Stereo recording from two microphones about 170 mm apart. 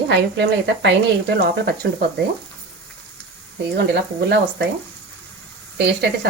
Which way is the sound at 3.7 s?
80° right.